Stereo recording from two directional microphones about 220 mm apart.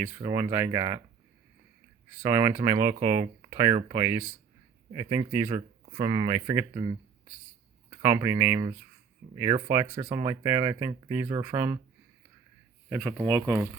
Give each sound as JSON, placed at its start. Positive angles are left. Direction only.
{"t": 0.0, "sound": "speech", "side_deg": -10}
{"t": 2.2, "sound": "speech", "side_deg": -10}
{"t": 9.8, "sound": "speech", "side_deg": -25}
{"t": 10.1, "sound": "speech", "side_deg": -15}
{"t": 12.9, "sound": "speech", "side_deg": -5}